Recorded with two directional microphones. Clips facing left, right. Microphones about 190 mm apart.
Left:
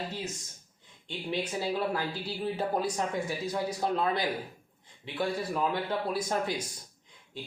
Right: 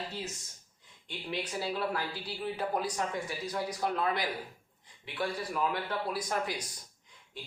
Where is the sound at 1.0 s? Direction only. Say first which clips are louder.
Left 4 dB; 25° left (ahead or behind).